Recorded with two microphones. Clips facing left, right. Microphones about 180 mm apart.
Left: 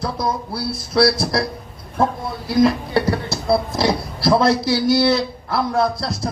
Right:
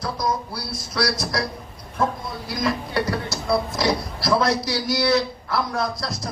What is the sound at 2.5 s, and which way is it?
Speech, 30° left (ahead or behind).